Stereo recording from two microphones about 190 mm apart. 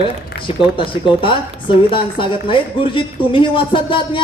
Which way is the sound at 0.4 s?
25° left (ahead or behind).